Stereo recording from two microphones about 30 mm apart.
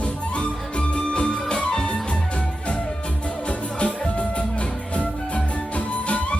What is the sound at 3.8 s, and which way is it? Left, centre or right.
Music, left.